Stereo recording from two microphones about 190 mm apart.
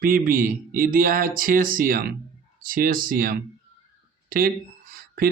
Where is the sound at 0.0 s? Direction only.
50° right (ahead or behind).